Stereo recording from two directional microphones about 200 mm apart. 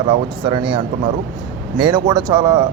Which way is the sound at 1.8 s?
20° right (ahead or behind).